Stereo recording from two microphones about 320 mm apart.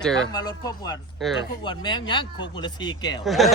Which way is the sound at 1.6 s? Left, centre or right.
Centre.